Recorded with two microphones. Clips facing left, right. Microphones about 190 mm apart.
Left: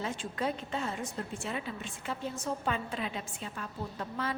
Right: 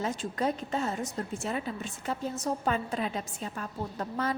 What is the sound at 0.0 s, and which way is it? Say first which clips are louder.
Speech: right 4 dB; 40° right (ahead or behind).